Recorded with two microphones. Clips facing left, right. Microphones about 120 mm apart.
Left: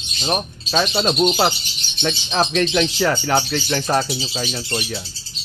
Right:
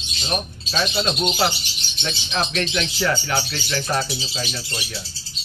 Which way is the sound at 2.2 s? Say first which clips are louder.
Left 5 dB; 35° left (ahead or behind).